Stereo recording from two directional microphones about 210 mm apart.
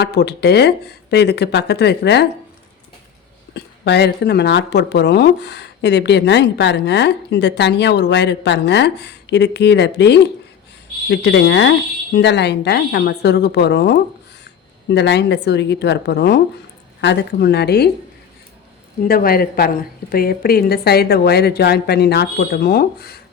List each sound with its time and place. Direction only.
0.0 s a woman's voice: 50° left (ahead or behind)
3.5 s a woman's voice: 55° left (ahead or behind)
19.0 s a woman's voice: 45° left (ahead or behind)